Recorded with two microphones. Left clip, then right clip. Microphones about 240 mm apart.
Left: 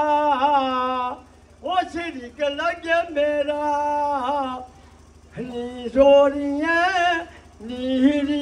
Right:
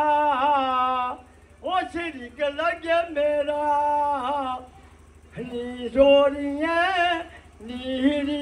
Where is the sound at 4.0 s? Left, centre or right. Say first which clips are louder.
Left 2 dB; left.